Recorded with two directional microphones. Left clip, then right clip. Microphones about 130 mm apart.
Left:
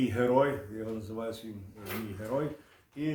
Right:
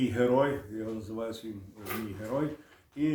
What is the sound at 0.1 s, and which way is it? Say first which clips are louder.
Speech: even; 15° left (ahead or behind).